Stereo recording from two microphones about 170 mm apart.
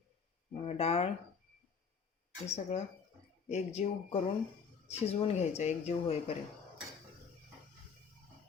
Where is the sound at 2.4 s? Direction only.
40° left (ahead or behind).